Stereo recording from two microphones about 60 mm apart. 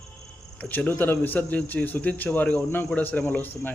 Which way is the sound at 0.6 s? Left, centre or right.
Left.